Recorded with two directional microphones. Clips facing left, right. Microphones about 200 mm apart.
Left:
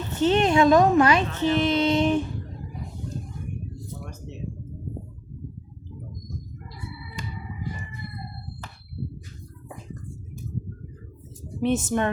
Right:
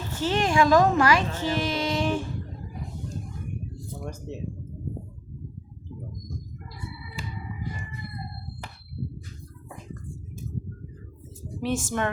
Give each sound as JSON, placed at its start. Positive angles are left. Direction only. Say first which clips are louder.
{"t": 0.1, "sound": "a woman's voice", "louder": "left 5 dB", "side_deg": 20}
{"t": 11.6, "sound": "a woman's voice", "louder": "left 4 dB", "side_deg": 20}